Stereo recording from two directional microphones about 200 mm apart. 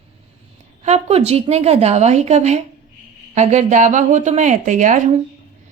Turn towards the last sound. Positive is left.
turn(degrees=-40)  # may be behind; listen again after turning